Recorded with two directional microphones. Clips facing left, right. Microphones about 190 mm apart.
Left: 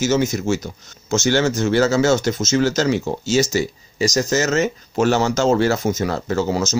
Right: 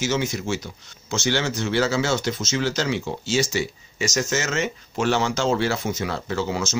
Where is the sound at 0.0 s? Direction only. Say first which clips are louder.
Left 6 dB; 45° left (ahead or behind).